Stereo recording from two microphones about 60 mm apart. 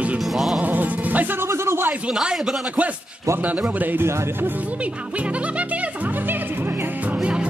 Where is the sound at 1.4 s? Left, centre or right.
Right.